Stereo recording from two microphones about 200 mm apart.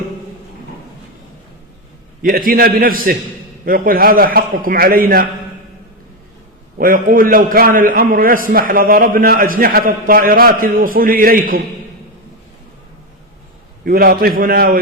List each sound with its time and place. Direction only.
2.2 s a man's voice: 45° right (ahead or behind)
6.7 s a man's voice: 45° right (ahead or behind)
13.8 s a man's voice: 50° right (ahead or behind)